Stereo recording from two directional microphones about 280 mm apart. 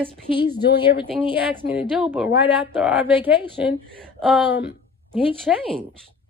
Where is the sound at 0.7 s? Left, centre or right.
Centre.